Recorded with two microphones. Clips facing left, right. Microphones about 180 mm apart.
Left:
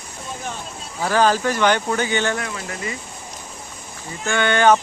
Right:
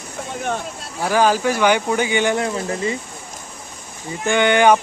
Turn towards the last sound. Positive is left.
turn(degrees=-15)  # may be behind; listen again after turning